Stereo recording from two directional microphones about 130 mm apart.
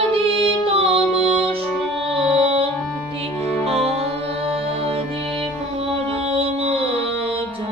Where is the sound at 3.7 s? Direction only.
50° right (ahead or behind).